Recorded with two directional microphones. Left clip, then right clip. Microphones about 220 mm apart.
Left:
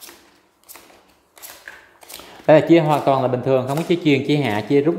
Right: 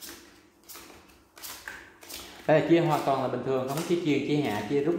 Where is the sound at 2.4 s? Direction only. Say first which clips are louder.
Left 10 dB; 45° left (ahead or behind).